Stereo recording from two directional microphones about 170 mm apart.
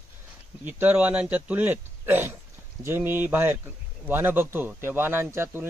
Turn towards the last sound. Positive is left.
turn(degrees=-15)  # may be behind; listen again after turning